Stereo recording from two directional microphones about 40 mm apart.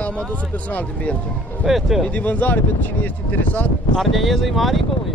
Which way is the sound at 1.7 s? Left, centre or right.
Centre.